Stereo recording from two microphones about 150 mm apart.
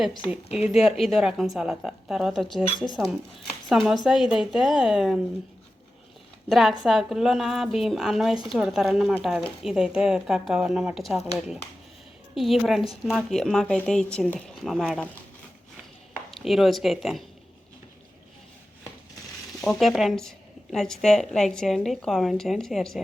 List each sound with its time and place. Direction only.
0.5 s a woman's voice: 5° right (ahead or behind)
3.7 s a woman's voice: centre (ahead or behind)
6.5 s a woman's voice: centre (ahead or behind)
16.3 s a woman's voice: centre (ahead or behind)
19.6 s a woman's voice: centre (ahead or behind)